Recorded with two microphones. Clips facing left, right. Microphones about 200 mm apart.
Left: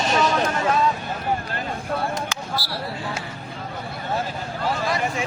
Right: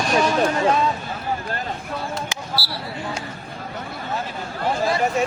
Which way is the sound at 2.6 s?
15° left (ahead or behind).